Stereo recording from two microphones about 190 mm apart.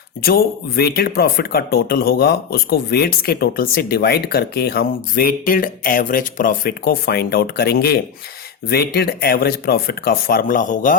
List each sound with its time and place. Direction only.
0.3 s speech: 55° left (ahead or behind)